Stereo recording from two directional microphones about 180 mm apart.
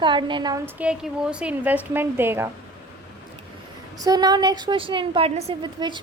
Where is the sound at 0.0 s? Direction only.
25° right (ahead or behind).